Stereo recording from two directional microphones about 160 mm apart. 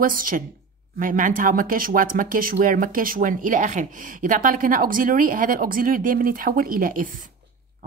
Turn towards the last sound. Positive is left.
turn(degrees=-60)  # may be behind; listen again after turning